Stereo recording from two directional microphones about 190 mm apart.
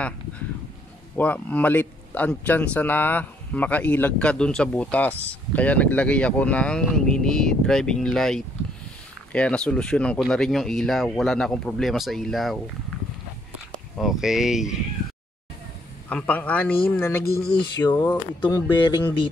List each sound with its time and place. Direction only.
1.1 s a man's voice: 10° left (ahead or behind)
13.9 s speech: centre (ahead or behind)
16.1 s a man's voice: 5° left (ahead or behind); by 19.1 s 25° left (ahead or behind)